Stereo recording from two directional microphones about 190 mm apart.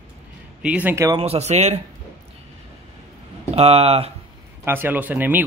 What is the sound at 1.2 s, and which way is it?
Speech, 35° right (ahead or behind).